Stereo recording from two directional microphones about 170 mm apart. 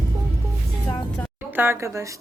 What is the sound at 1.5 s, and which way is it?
Speech, 10° right (ahead or behind).